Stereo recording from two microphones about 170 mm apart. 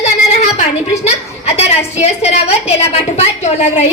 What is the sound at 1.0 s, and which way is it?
A woman's voice, 40° left (ahead or behind).